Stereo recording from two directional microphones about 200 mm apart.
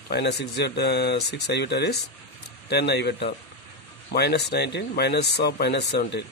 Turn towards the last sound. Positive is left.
turn(degrees=55)  # may be behind; listen again after turning